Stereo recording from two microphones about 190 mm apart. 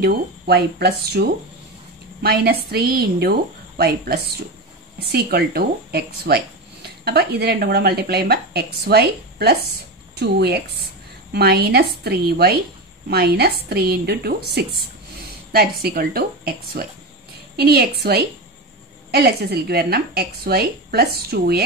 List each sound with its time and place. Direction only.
0.0 s a woman's voice: 60° right (ahead or behind)
19.0 s speech: 55° right (ahead or behind)